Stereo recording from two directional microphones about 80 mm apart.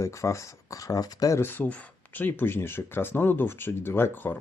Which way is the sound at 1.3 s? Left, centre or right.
Left.